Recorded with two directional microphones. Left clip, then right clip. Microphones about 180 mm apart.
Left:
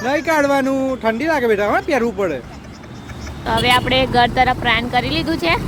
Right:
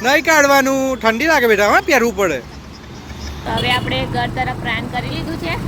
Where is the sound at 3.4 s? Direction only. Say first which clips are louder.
Left 3 dB; 30° left (ahead or behind).